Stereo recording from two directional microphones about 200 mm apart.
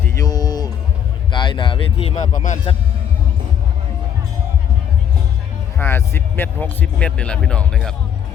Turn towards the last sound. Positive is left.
turn(degrees=5)  # may be behind; listen again after turning